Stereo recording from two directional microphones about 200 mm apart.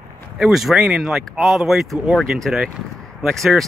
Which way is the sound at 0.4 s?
Centre (ahead or behind).